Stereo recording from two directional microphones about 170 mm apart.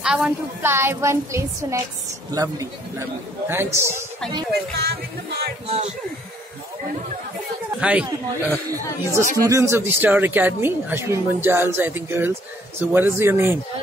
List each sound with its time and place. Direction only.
0.0 s a woman's voice: 5° right (ahead or behind)
4.7 s music: 75° right (ahead or behind)
5.7 s speech: 40° right (ahead or behind)
7.8 s a woman's voice: 10° right (ahead or behind)
8.6 s a woman's voice: 20° right (ahead or behind)